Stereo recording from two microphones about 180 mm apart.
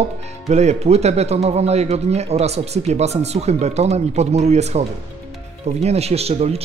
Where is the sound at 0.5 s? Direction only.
40° right (ahead or behind).